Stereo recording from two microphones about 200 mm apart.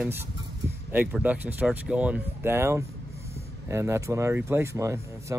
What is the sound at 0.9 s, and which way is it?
Speech, 10° right (ahead or behind).